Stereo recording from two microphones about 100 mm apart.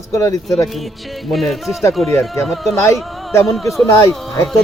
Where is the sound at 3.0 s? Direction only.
Centre (ahead or behind).